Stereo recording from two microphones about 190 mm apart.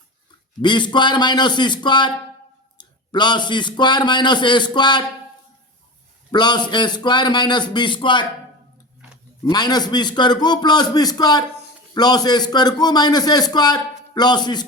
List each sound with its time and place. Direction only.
0.6 s a man's voice: 25° left (ahead or behind)
6.3 s a man's voice: 25° left (ahead or behind)
9.4 s a man's voice: 20° left (ahead or behind)